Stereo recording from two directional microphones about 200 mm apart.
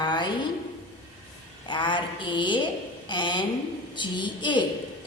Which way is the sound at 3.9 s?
25° left (ahead or behind).